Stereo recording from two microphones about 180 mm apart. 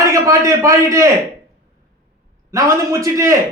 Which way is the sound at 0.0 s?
15° right (ahead or behind).